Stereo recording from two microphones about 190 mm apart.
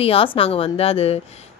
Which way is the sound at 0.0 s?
30° left (ahead or behind).